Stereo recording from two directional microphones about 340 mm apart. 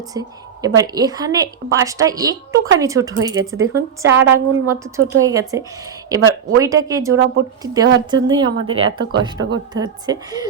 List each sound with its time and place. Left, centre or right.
0.1 s a woman's voice: centre
7.1 s speech: right
7.6 s a woman's voice: centre